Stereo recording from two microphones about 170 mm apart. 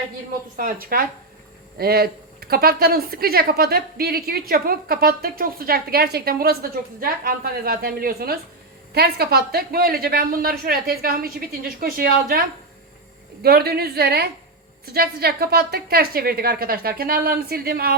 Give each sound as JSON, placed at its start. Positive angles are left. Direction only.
{"t": 0.5, "sound": "a woman's voice", "side_deg": -55}